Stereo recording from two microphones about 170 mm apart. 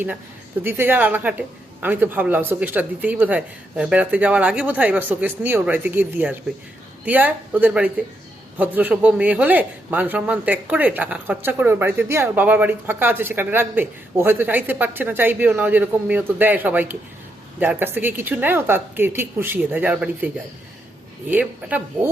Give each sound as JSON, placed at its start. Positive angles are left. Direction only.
{"t": 0.6, "sound": "speech", "side_deg": -10}